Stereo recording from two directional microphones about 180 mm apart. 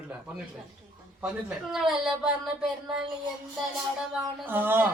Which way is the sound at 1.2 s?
5° right (ahead or behind).